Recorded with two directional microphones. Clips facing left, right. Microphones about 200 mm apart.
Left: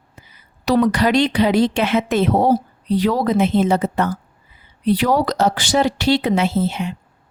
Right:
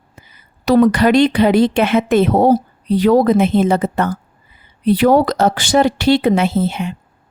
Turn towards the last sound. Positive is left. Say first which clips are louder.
# right 2 dB
turn(degrees=-55)  # may be behind; listen again after turning